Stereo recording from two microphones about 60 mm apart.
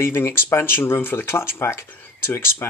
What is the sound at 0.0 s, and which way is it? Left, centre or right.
Speech, left.